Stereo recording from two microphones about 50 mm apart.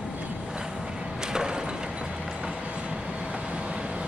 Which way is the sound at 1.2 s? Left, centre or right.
Centre.